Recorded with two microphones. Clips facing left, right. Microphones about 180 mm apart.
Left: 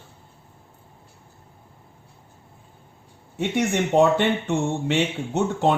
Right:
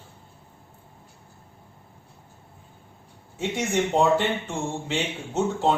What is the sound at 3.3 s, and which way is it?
Speech, 65° left (ahead or behind).